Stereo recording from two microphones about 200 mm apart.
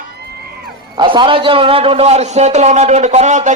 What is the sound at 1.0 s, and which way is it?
A man's voice, 25° right (ahead or behind).